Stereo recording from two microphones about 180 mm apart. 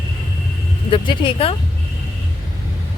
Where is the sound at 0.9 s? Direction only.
25° left (ahead or behind).